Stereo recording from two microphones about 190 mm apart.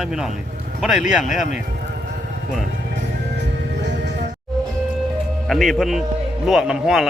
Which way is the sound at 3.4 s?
65° right (ahead or behind).